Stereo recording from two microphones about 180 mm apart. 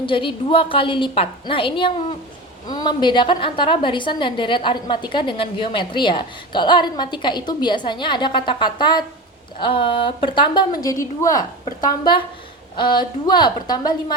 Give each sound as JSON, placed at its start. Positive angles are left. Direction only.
{"t": 0.0, "sound": "a woman's voice", "side_deg": 30}